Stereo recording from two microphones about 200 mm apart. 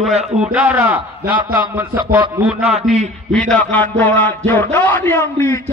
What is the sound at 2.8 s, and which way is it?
Speech, 35° right (ahead or behind).